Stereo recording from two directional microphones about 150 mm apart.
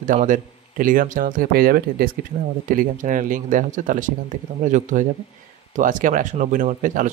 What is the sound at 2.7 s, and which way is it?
A man's voice, 65° right (ahead or behind).